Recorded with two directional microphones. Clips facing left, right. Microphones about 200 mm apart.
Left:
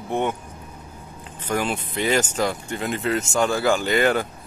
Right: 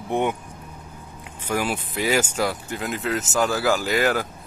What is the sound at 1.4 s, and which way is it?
Speech, 10° right (ahead or behind).